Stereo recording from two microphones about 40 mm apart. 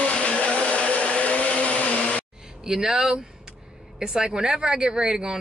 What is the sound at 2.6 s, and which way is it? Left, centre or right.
Speech, centre.